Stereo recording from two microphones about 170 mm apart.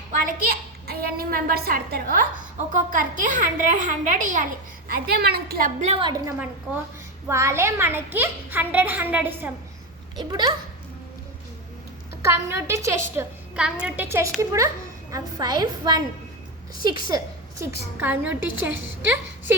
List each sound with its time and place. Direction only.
0.1 s a woman's voice: 60° right (ahead or behind)
4.9 s a woman's voice: 65° right (ahead or behind)
5.8 s a woman's voice: 30° right (ahead or behind); by 9.5 s 10° right (ahead or behind)
10.2 s a woman's voice: 25° right (ahead or behind)
12.2 s a child's voice: 15° right (ahead or behind)
17.6 s a child's voice: 10° right (ahead or behind)